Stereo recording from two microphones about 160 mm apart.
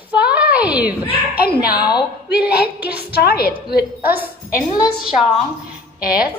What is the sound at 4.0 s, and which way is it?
Speech, 10° right (ahead or behind).